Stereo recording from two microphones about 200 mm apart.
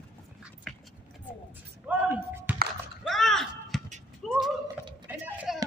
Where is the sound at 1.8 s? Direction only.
10° right (ahead or behind).